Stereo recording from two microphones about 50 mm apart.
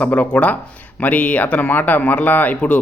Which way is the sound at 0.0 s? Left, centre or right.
Left.